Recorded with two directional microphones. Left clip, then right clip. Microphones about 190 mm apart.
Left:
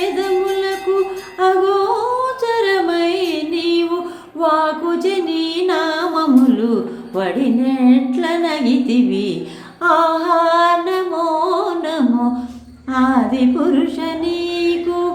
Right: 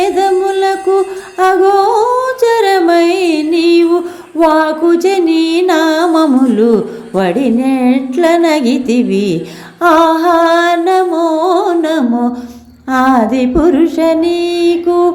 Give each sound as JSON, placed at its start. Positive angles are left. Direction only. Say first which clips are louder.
{"t": 0.0, "sound": "music", "louder": "right 7 dB", "side_deg": -40}